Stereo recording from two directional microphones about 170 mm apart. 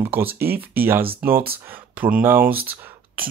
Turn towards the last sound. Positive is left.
turn(degrees=-10)  # may be behind; listen again after turning